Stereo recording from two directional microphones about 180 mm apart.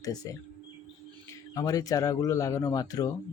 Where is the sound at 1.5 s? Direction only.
20° left (ahead or behind).